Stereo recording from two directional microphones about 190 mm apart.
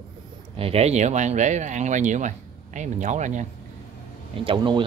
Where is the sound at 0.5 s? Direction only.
30° right (ahead or behind).